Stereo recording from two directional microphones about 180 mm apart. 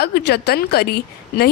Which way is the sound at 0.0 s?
65° left (ahead or behind).